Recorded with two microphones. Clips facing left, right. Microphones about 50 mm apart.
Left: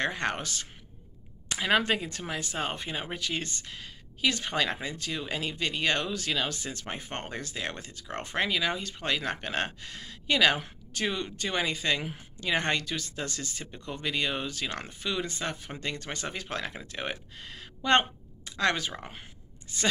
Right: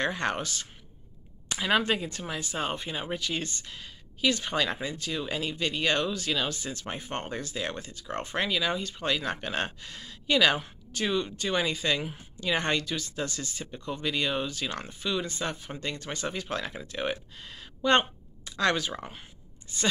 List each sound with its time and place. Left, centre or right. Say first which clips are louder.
0.0 s speech: right 1 dB; left
11.4 s speech: left 1 dB; left
16.9 s speech: right 4 dB; left
17.4 s a sound: right 5 dB; left
18.6 s speech: right 1 dB; left